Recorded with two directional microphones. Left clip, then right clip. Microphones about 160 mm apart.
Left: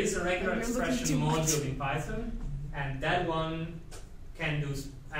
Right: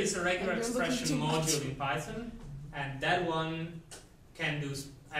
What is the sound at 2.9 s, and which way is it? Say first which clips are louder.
Speech: even; 10° right (ahead or behind).